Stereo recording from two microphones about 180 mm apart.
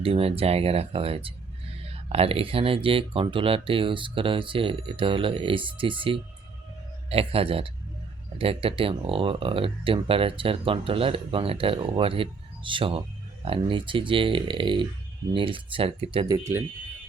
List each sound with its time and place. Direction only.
0.0 s a man's voice: 30° right (ahead or behind)
16.4 s speech: 15° right (ahead or behind)